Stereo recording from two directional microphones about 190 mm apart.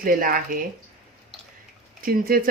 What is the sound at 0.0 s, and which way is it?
Speech, 45° right (ahead or behind).